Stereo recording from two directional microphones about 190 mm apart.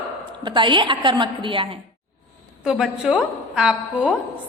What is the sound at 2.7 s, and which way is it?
A woman's voice, 5° right (ahead or behind).